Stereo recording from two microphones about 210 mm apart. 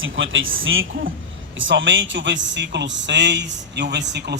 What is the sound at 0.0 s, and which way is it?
A man's voice, 65° right (ahead or behind).